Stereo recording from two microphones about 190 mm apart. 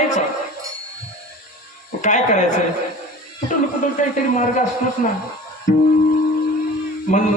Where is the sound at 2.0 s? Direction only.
40° left (ahead or behind).